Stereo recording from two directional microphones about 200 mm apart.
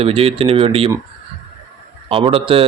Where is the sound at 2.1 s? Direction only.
30° right (ahead or behind).